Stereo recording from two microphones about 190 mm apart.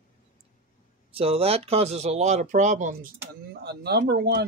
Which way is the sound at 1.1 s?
30° right (ahead or behind).